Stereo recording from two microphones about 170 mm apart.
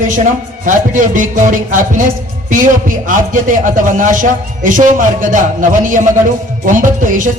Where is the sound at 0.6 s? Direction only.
50° right (ahead or behind).